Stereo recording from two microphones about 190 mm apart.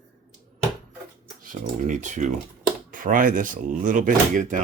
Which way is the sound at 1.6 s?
40° right (ahead or behind).